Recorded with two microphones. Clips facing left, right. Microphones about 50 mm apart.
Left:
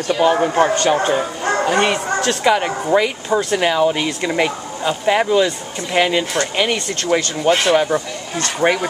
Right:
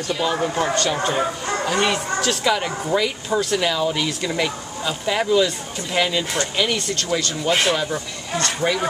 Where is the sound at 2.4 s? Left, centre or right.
Left.